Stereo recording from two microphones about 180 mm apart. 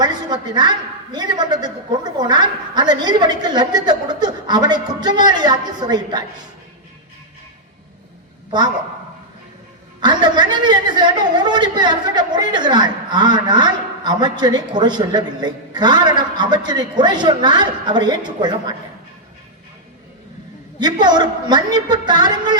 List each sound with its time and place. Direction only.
0.0 s a man's voice: 25° right (ahead or behind)
8.4 s a woman's voice: 25° right (ahead or behind)
10.0 s a man's voice: 25° right (ahead or behind)
20.7 s a man's voice: 25° right (ahead or behind)